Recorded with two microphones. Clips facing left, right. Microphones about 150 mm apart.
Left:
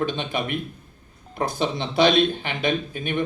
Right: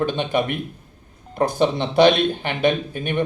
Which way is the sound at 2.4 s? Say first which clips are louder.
Right 5 dB; 50° right (ahead or behind).